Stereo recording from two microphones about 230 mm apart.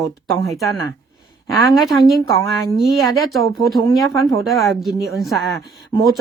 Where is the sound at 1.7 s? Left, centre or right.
Centre.